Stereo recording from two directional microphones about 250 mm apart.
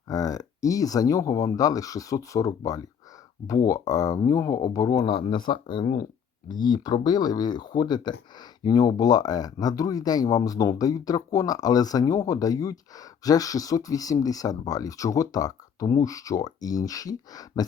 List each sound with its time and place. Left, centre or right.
0.1 s speech: centre